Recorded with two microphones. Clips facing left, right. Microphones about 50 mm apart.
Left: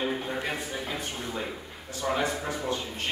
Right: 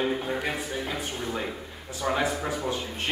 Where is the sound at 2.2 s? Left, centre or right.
Centre.